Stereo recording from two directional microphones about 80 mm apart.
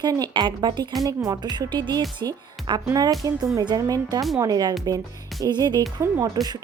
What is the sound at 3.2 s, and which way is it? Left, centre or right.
Speech, right.